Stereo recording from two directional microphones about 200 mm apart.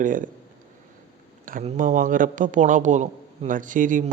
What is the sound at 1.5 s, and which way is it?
Speech, 40° right (ahead or behind).